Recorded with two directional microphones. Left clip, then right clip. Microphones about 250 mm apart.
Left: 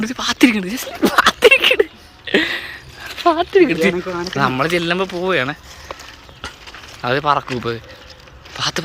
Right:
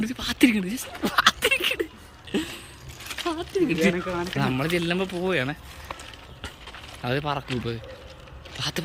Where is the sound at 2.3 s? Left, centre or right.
Centre.